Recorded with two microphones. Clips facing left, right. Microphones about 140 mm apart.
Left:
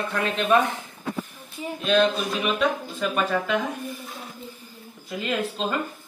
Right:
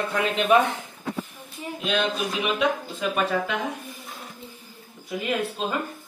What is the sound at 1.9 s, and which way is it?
Speech, 15° right (ahead or behind).